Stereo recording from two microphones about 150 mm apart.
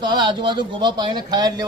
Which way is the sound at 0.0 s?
30° right (ahead or behind).